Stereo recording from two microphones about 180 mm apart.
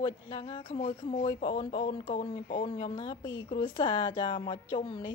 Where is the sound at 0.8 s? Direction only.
45° left (ahead or behind).